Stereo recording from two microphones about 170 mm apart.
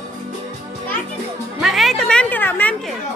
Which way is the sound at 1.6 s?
Centre (ahead or behind).